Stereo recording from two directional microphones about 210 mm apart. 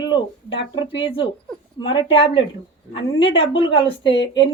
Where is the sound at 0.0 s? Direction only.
25° left (ahead or behind).